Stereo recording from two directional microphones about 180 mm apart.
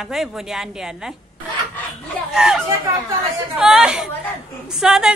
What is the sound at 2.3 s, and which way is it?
A woman's voice, 5° right (ahead or behind).